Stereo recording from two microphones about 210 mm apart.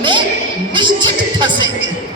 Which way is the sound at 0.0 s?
25° right (ahead or behind).